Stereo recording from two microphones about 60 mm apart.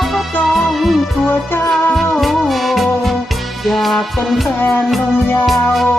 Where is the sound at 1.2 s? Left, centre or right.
Left.